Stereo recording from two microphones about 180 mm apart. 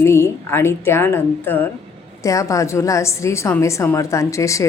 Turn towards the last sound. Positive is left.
turn(degrees=15)  # may be behind; listen again after turning